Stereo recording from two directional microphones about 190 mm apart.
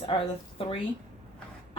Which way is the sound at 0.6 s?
30° left (ahead or behind).